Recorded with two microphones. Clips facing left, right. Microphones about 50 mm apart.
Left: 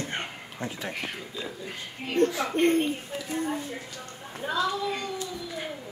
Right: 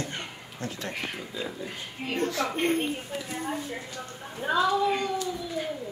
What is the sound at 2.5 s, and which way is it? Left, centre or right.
A woman's voice, centre.